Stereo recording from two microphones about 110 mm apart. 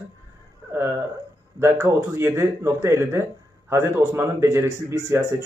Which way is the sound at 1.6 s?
25° right (ahead or behind).